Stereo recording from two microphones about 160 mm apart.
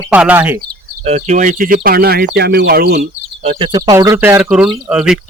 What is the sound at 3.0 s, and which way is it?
Speech, 45° right (ahead or behind).